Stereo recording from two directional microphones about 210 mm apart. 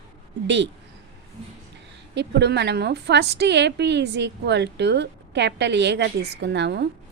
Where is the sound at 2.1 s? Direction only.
55° right (ahead or behind).